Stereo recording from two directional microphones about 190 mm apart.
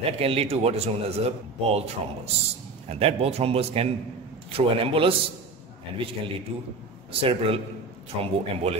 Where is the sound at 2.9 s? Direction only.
30° right (ahead or behind).